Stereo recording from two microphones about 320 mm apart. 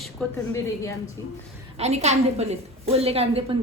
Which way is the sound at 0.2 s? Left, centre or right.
Centre.